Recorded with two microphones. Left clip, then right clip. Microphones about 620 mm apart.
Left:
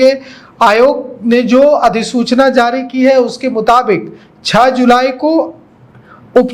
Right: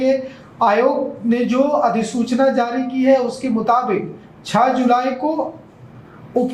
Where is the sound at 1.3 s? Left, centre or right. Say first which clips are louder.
Left 10 dB; left.